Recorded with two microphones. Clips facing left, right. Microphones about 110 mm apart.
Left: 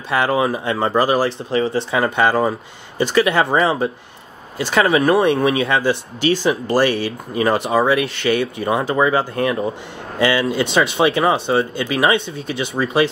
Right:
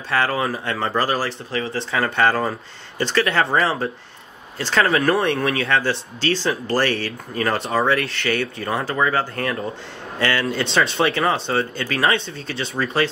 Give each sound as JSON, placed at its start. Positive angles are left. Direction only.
{"t": 0.1, "sound": "speech", "side_deg": 15}
{"t": 4.9, "sound": "speech", "side_deg": 25}